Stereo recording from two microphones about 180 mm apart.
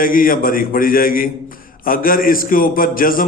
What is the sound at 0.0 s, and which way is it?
A man's voice, 50° left (ahead or behind).